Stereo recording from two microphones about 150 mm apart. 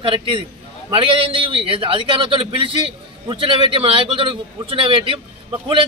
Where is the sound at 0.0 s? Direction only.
35° right (ahead or behind).